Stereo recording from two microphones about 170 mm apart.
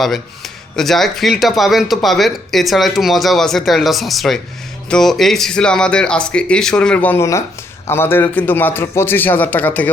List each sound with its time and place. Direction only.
0.0 s a man's voice: centre (ahead or behind)